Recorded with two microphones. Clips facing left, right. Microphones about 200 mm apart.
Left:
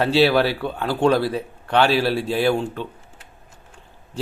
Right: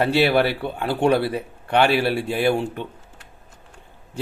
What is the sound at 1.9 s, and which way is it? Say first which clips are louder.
Speech: left 1 dB; 55° right (ahead or behind).